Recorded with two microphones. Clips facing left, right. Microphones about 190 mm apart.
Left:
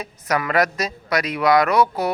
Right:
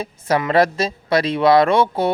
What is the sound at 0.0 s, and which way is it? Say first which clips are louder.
Speech: right 4 dB; 25° right (ahead or behind).